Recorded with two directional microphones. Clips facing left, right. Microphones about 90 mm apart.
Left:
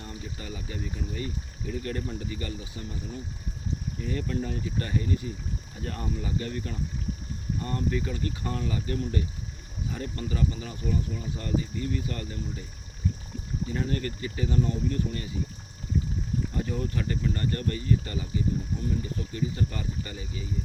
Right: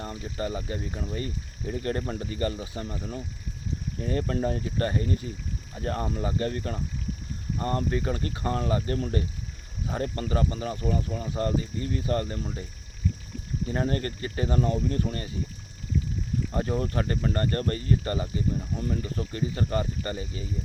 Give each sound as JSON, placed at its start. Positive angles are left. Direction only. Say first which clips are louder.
{"t": 0.0, "sound": "speech", "louder": "right 7 dB", "side_deg": -45}
{"t": 13.7, "sound": "speech", "louder": "right 3 dB", "side_deg": -45}
{"t": 16.5, "sound": "speech", "louder": "right 3 dB", "side_deg": -45}